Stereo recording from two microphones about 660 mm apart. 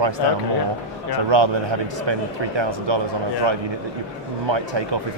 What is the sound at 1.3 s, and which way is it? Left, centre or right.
Speech, right.